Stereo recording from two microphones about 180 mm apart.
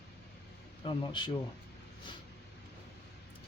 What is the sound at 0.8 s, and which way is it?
Speech, 30° left (ahead or behind).